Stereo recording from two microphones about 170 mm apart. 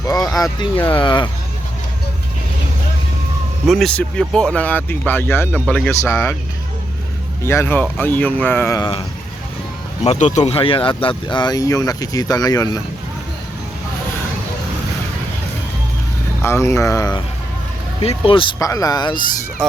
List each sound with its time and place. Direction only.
0.0 s vehicle: 20° left (ahead or behind)
0.9 s speech: 25° left (ahead or behind)
3.7 s speech: centre (ahead or behind)
7.4 s speech: 15° left (ahead or behind)
10.0 s speech: 40° left (ahead or behind); by 12.8 s 20° left (ahead or behind)
16.4 s speech: 15° left (ahead or behind)
18.0 s speech: 35° left (ahead or behind)